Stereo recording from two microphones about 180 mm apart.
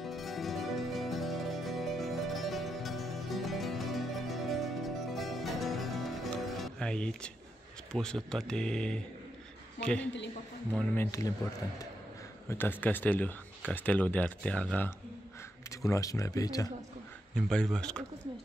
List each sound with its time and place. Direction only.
0.0 s music: centre (ahead or behind)
7.9 s a man's voice: 5° left (ahead or behind)
11.0 s speech: 15° left (ahead or behind)
12.4 s speech: 10° left (ahead or behind)
15.8 s speech: 20° left (ahead or behind)
17.5 s speech: 5° left (ahead or behind)